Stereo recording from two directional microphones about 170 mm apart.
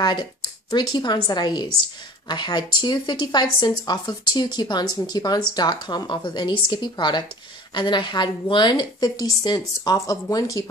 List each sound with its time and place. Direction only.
0.0 s a woman's voice: 25° left (ahead or behind)